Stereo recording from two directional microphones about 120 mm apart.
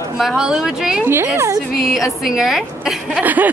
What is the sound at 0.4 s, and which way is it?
Speech, 5° right (ahead or behind).